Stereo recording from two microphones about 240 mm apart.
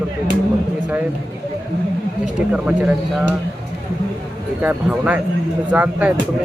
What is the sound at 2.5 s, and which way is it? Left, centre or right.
Speech, centre.